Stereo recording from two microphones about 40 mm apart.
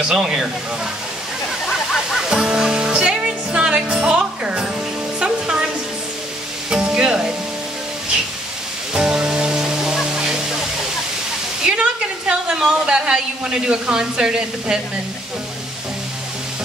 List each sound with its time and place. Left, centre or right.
0.0 s speech: centre
2.1 s music: centre
5.2 s music: right
6.7 s music: right
8.9 s music: right
10.0 s waterfall: centre
11.6 s a woman's voice: right